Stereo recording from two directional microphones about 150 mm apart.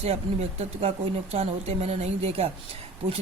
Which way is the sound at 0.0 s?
45° right (ahead or behind).